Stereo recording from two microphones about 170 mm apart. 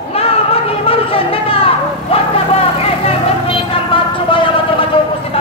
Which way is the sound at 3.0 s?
30° left (ahead or behind).